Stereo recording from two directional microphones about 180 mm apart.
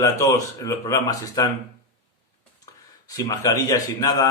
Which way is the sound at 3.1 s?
20° left (ahead or behind).